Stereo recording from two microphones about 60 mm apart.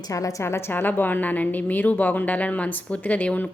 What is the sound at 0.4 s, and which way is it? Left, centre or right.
A woman's voice, left.